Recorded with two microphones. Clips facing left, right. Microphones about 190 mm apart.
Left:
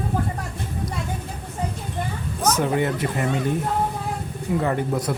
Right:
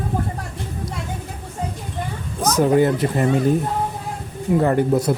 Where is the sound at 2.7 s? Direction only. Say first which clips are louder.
Right 6 dB; 35° right (ahead or behind).